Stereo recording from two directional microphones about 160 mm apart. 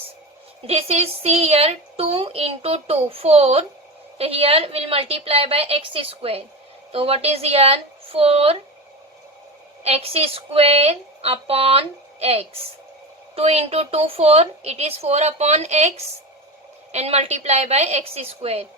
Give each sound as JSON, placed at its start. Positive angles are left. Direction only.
{"t": 0.7, "sound": "speech", "side_deg": -40}
{"t": 9.8, "sound": "a woman's voice", "side_deg": -40}